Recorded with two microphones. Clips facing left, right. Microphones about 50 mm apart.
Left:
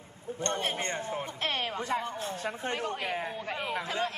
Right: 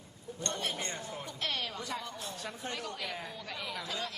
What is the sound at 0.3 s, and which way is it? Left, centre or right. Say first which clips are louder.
A man's voice: left 5 dB; left.